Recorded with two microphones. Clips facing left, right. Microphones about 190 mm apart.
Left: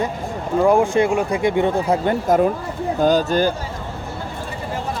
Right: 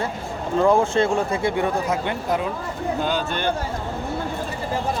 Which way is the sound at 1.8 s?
40° left (ahead or behind).